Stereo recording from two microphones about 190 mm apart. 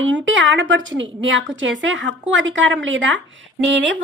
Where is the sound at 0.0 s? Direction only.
75° right (ahead or behind).